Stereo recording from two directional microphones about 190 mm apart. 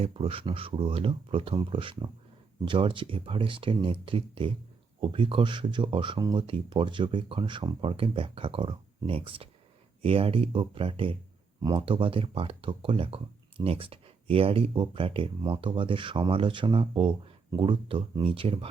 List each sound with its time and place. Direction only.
0.0 s speech: 30° right (ahead or behind)